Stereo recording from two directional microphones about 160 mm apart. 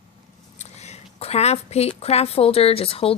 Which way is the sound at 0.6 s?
45° left (ahead or behind).